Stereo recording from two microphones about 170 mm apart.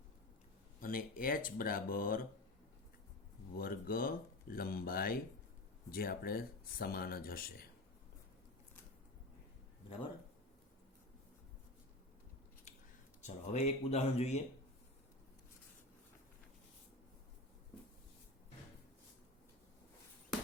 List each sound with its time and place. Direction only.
0.8 s speech: 55° left (ahead or behind)
3.6 s speech: 60° left (ahead or behind)
13.2 s speech: 40° left (ahead or behind)